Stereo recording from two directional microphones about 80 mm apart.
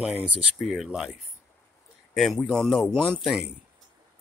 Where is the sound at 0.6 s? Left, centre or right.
Centre.